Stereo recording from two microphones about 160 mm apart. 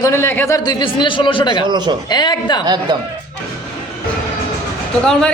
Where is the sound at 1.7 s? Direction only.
30° right (ahead or behind).